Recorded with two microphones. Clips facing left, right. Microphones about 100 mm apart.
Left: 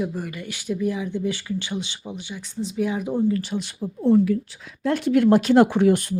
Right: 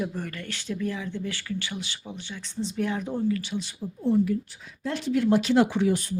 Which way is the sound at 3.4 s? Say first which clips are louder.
Left 4 dB; 45° left (ahead or behind).